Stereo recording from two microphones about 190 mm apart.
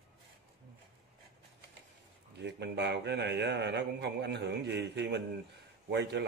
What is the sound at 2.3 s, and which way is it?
A man's voice, 65° right (ahead or behind).